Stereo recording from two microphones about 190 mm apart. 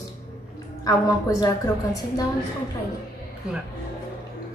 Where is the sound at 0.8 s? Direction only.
20° left (ahead or behind).